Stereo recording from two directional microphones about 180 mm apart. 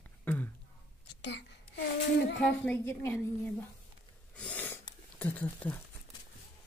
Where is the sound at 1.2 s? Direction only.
75° left (ahead or behind).